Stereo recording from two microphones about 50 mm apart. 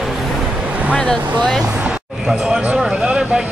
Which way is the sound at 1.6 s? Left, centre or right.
Centre.